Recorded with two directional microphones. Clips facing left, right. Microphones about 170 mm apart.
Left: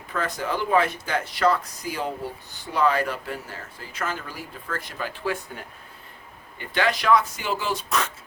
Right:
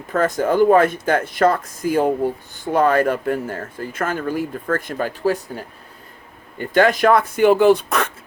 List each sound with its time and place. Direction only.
0.1 s speech: 50° right (ahead or behind)